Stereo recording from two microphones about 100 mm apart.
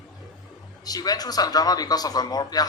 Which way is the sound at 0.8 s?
40° left (ahead or behind).